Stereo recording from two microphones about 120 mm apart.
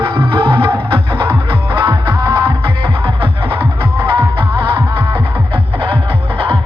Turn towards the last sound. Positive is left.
turn(degrees=-45)  # may be behind; listen again after turning